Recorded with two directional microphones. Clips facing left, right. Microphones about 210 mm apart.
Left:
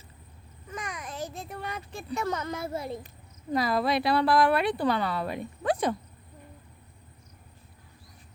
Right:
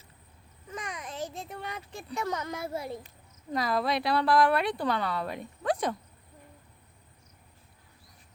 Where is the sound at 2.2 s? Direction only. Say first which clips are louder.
Left 1 dB; 15° right (ahead or behind).